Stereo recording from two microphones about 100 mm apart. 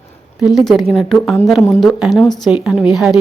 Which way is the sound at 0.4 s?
Centre (ahead or behind).